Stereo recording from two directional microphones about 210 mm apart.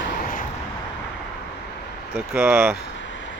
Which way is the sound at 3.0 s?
60° left (ahead or behind).